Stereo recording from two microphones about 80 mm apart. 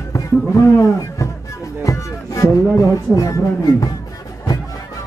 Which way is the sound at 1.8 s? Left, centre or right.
Left.